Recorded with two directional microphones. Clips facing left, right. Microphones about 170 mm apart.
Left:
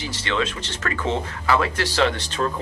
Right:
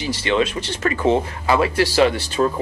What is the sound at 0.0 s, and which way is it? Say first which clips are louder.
Speech: right 6 dB; 15° right (ahead or behind).